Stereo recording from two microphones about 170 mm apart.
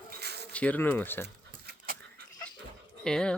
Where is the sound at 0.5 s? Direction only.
10° left (ahead or behind).